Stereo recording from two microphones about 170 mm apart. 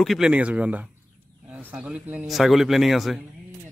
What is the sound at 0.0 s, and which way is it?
A man's voice, centre (ahead or behind).